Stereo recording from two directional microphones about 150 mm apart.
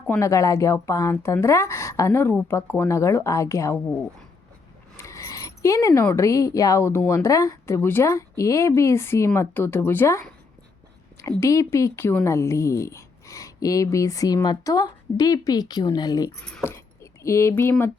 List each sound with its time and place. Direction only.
0.2 s speech: 20° left (ahead or behind)
4.9 s speech: 20° left (ahead or behind)
16.4 s speech: 10° left (ahead or behind)
16.7 s speech: 20° left (ahead or behind)